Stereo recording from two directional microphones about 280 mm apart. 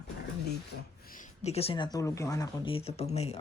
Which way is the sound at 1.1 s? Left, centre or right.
Left.